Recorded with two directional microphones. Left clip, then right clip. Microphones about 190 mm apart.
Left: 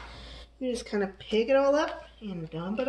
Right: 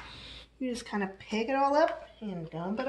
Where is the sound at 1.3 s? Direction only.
25° right (ahead or behind).